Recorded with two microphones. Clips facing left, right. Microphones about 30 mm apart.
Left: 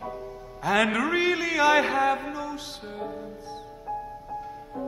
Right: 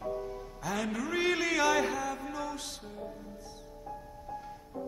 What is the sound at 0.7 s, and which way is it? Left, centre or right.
Music, left.